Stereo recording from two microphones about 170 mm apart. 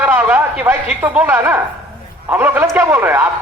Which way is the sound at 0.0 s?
10° right (ahead or behind).